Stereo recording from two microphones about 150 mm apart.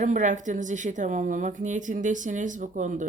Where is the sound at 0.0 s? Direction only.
55° right (ahead or behind).